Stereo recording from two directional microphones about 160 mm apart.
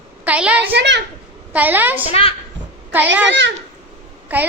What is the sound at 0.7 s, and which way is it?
Speech, 90° right.